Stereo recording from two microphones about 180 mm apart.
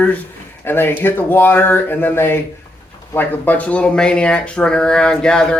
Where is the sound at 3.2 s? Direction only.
10° left (ahead or behind).